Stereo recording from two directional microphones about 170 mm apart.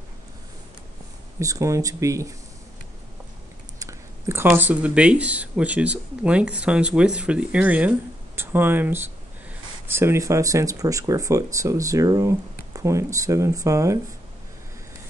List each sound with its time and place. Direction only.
1.4 s speech: 20° right (ahead or behind)
3.8 s speech: 15° right (ahead or behind)